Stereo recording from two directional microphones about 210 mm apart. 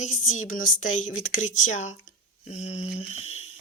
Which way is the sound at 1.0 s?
35° left (ahead or behind).